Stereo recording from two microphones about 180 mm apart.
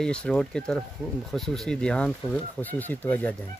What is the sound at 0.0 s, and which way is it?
Speech, 5° left (ahead or behind).